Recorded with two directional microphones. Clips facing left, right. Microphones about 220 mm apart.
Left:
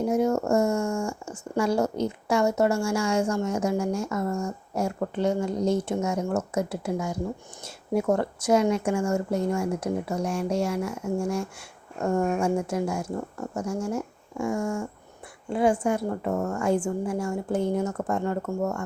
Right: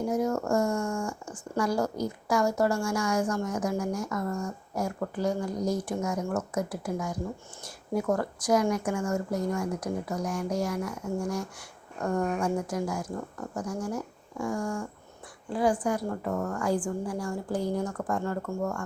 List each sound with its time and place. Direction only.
0.0 s speech: 25° left (ahead or behind)